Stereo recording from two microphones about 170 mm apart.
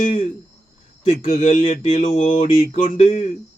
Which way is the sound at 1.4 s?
45° left (ahead or behind).